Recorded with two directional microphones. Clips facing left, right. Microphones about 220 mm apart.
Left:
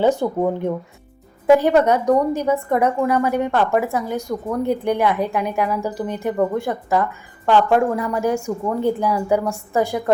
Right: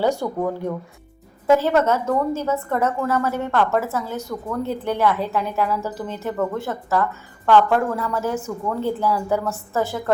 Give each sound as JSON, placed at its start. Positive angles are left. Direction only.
{"t": 0.2, "sound": "a woman's voice", "side_deg": 20}